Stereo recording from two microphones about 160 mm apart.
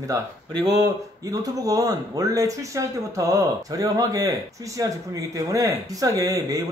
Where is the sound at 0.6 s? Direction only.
20° right (ahead or behind).